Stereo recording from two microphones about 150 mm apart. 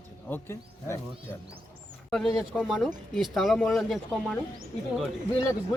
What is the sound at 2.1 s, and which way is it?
Speech, centre (ahead or behind).